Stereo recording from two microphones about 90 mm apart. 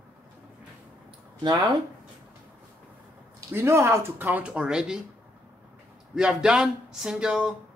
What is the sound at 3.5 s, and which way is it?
Speech, 30° right (ahead or behind).